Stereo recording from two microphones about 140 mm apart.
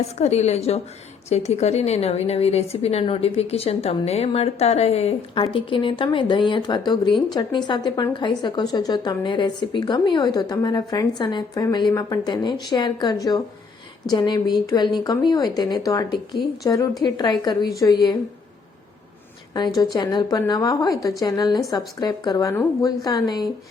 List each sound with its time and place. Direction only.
0.2 s a woman's voice: 50° left (ahead or behind); by 18.2 s 30° left (ahead or behind)
19.5 s speech: 30° left (ahead or behind)